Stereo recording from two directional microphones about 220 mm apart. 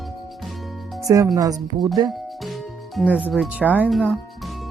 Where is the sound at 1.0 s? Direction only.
15° right (ahead or behind).